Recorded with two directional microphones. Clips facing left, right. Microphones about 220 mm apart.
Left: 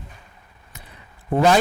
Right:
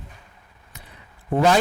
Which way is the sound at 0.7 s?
15° left (ahead or behind).